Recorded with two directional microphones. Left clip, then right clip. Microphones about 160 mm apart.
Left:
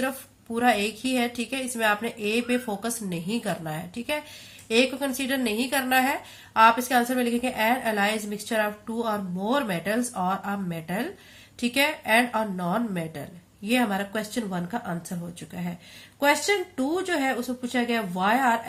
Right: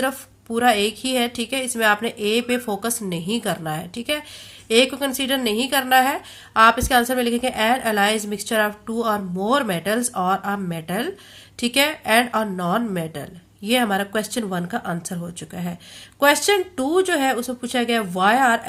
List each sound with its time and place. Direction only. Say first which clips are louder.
0.5 s speech: right 5 dB; 35° right (ahead or behind)